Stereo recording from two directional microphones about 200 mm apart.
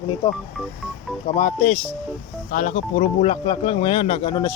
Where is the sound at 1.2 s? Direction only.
45° left (ahead or behind).